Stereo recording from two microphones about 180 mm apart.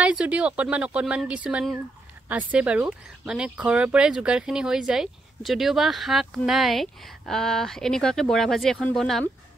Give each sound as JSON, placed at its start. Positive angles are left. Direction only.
{"t": 0.0, "sound": "speech", "side_deg": -5}